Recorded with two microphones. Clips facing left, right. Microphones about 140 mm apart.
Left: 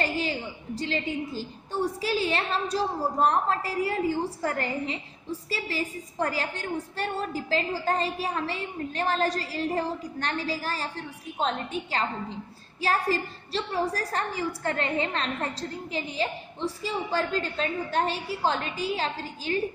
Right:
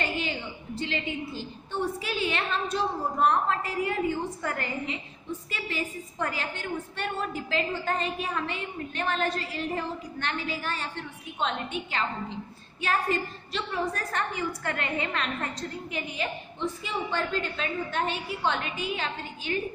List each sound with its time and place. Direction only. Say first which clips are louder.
0.0 s a woman's voice: left 3 dB; 35° left (ahead or behind)